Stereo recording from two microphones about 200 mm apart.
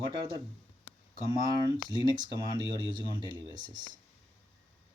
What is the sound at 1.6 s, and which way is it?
Speech, 20° right (ahead or behind).